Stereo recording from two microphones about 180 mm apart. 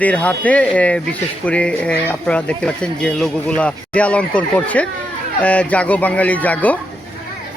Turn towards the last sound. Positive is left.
turn(degrees=10)  # may be behind; listen again after turning